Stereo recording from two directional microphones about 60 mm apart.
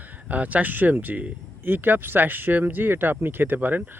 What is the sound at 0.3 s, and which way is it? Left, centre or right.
Speech, right.